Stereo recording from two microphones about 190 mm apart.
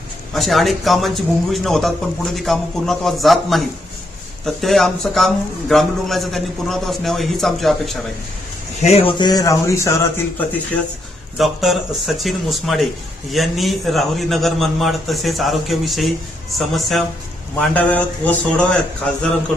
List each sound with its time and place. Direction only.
0.3 s a man's voice: centre (ahead or behind)
8.8 s speech: 30° left (ahead or behind); by 10.1 s 15° left (ahead or behind)
11.3 s a man's voice: centre (ahead or behind)